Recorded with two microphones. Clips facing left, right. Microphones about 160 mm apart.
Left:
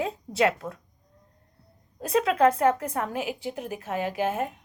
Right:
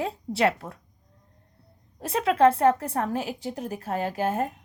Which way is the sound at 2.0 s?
25° right (ahead or behind).